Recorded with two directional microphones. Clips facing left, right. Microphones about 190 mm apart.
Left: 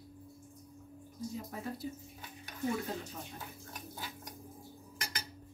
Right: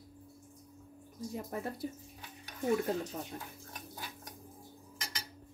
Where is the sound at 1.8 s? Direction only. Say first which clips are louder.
Right 1 dB; 55° right (ahead or behind).